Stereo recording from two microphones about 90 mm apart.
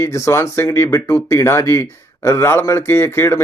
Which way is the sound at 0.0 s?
35° left (ahead or behind).